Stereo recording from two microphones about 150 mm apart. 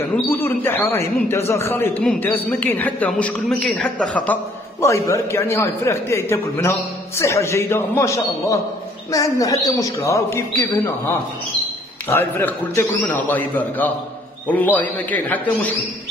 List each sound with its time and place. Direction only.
0.1 s a man's voice: 15° left (ahead or behind)
4.7 s a man's voice: 20° left (ahead or behind)
12.1 s a man's voice: 15° left (ahead or behind)